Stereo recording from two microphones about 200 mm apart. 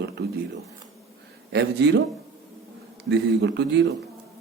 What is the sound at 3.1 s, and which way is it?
Speech, 60° right (ahead or behind).